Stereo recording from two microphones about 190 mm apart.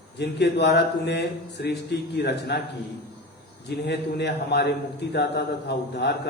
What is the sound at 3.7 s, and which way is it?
A man's voice, 65° left (ahead or behind).